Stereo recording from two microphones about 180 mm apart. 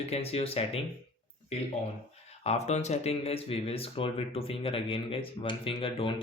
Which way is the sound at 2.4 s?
35° left (ahead or behind).